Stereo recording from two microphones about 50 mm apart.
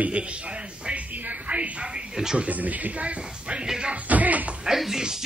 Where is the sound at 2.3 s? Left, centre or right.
Right.